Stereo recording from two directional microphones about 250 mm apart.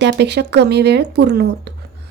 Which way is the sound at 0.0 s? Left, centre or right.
Right.